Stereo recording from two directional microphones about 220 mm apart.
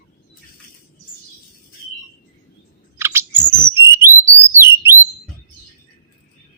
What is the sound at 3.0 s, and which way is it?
Bird vocalization, 10° right (ahead or behind).